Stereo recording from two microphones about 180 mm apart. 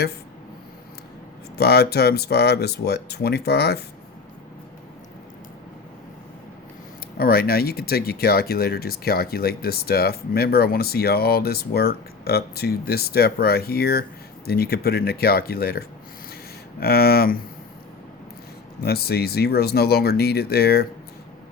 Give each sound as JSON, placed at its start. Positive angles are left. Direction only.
{"t": 1.5, "sound": "speech", "side_deg": 65}
{"t": 7.2, "sound": "speech", "side_deg": 55}
{"t": 16.8, "sound": "speech", "side_deg": 60}
{"t": 18.8, "sound": "speech", "side_deg": 60}